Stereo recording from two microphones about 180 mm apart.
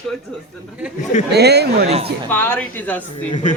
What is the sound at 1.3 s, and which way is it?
Speech, 65° right (ahead or behind).